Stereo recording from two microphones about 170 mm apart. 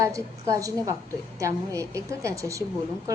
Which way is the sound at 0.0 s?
20° right (ahead or behind).